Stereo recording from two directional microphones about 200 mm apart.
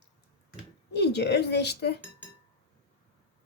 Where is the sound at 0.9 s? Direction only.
55° left (ahead or behind).